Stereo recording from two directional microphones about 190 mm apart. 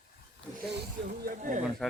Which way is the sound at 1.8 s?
Centre (ahead or behind).